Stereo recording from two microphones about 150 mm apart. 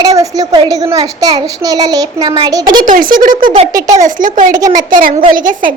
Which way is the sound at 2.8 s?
70° right (ahead or behind).